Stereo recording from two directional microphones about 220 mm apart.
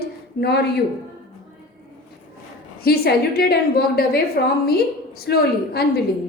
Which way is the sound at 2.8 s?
45° left (ahead or behind).